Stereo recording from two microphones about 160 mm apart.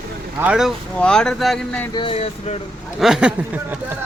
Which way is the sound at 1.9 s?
35° left (ahead or behind).